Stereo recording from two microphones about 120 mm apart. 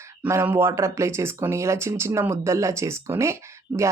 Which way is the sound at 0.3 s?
20° right (ahead or behind).